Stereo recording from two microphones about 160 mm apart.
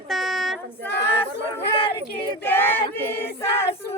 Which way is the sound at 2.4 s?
10° left (ahead or behind).